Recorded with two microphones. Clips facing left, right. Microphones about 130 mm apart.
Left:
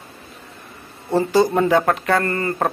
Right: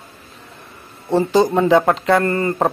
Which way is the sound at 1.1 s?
15° right (ahead or behind).